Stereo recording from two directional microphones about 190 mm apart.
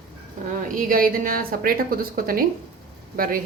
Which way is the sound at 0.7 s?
45° right (ahead or behind).